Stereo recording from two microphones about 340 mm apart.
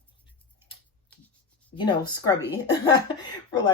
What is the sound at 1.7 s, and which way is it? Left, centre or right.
Speech, centre.